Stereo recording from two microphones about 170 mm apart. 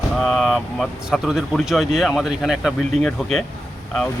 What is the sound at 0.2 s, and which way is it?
Speech, centre (ahead or behind).